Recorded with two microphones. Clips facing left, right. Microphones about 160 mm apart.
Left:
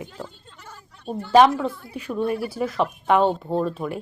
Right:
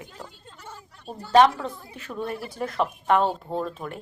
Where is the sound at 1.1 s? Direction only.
Centre (ahead or behind).